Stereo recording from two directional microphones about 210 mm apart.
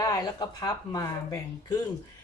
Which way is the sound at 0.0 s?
15° left (ahead or behind).